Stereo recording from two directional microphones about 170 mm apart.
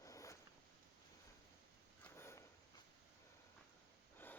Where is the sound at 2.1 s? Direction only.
15° left (ahead or behind).